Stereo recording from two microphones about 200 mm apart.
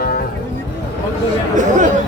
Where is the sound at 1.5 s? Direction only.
40° right (ahead or behind).